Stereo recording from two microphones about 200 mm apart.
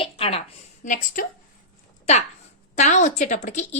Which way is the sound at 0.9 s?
45° left (ahead or behind).